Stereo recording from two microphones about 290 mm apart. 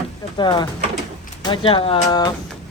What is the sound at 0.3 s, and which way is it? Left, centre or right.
Speech, centre.